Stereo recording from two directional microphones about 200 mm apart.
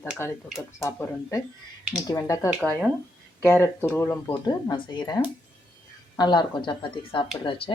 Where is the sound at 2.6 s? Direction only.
5° left (ahead or behind).